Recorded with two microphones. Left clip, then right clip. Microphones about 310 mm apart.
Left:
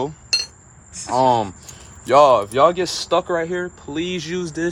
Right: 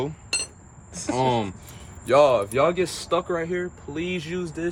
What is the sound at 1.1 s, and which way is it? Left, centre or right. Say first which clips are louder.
Speech: left 7 dB; centre.